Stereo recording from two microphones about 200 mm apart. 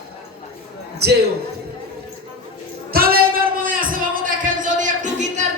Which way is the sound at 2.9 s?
50° right (ahead or behind).